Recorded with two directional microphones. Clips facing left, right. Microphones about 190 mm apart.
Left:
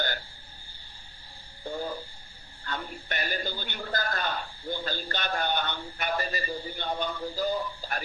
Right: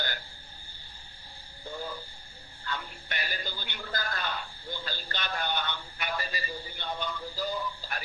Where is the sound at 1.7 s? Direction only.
40° left (ahead or behind).